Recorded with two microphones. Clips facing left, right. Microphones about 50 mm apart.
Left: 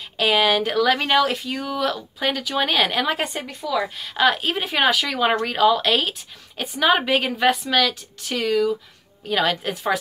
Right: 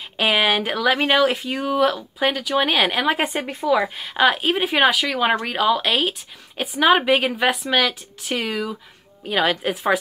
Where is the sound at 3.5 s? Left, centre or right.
Right.